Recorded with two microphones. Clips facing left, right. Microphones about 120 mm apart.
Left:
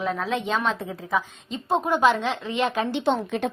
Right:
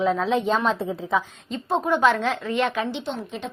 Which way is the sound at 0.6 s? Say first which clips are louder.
Right 3 dB; 35° right (ahead or behind).